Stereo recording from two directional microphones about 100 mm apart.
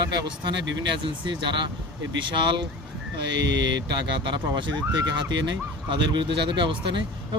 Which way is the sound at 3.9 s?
50° right (ahead or behind).